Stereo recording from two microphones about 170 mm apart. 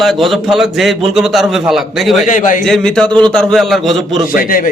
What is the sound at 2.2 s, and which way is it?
Speech, 50° left (ahead or behind).